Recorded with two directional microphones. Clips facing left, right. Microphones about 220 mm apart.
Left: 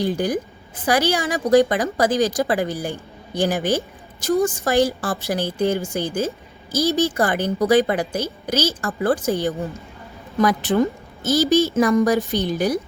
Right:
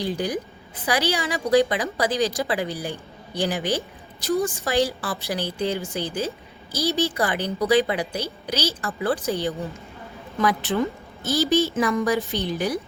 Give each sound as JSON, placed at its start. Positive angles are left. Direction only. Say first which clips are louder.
{"t": 0.0, "sound": "a woman's voice", "louder": "left 4 dB", "side_deg": 45}
{"t": 10.8, "sound": "a woman's voice", "louder": "left 5 dB", "side_deg": 45}